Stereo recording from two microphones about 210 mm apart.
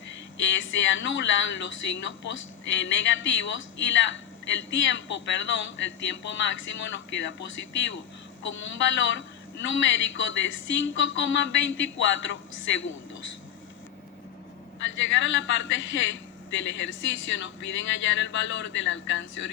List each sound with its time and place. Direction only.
0.3 s speech: 65° left (ahead or behind)
14.8 s speech: 65° left (ahead or behind)